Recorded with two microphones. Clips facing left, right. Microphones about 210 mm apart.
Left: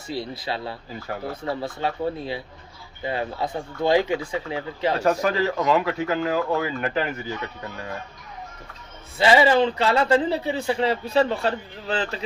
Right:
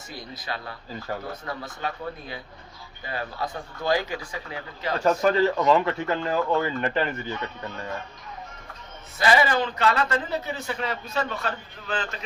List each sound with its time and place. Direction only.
0.1 s a man's voice: 25° left (ahead or behind)
5.0 s speech: 5° left (ahead or behind)
9.1 s a man's voice: 25° left (ahead or behind)